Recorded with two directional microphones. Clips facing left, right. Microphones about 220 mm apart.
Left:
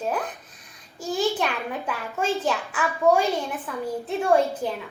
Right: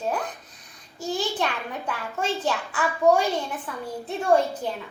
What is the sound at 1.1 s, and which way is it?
A child's voice, centre (ahead or behind).